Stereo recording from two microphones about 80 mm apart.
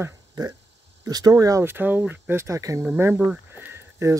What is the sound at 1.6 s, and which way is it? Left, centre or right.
Speech, right.